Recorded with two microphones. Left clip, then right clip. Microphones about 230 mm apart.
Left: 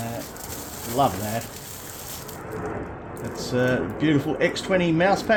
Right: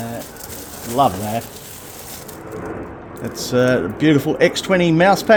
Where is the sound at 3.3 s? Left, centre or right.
Right.